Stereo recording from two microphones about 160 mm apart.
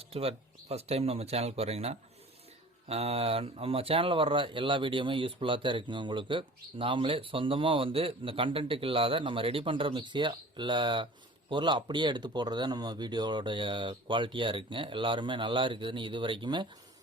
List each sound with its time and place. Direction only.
0.0 s speech: 35° right (ahead or behind)